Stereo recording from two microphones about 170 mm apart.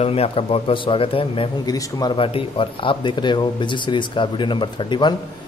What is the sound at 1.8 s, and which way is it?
Speech, 20° left (ahead or behind).